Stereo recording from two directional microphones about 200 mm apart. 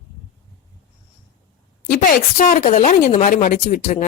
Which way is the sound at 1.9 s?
45° left (ahead or behind).